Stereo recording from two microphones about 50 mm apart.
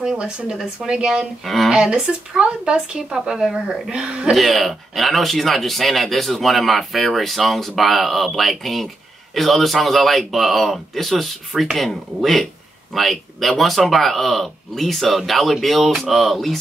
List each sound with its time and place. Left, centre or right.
0.2 s speech: centre
1.4 s speech: centre
1.7 s speech: centre
3.9 s speech: centre
4.3 s speech: centre